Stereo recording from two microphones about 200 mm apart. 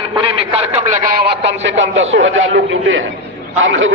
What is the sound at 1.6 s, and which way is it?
A man's voice, 70° right (ahead or behind).